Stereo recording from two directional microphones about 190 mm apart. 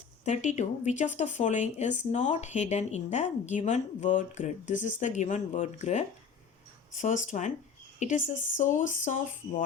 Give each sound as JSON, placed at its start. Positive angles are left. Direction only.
{"t": 0.3, "sound": "speech", "side_deg": 40}